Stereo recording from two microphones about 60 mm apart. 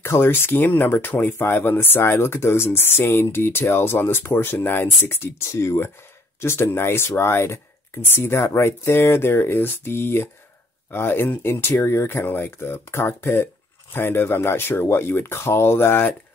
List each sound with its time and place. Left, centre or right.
0.0 s speech: left